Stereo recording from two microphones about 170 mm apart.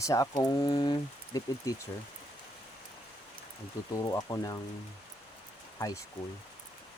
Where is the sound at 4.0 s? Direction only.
20° left (ahead or behind).